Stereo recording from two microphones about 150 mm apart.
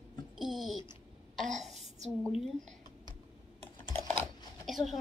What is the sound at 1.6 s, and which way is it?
Speech, 50° right (ahead or behind).